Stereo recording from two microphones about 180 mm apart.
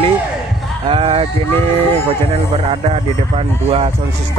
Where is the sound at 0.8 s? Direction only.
30° right (ahead or behind).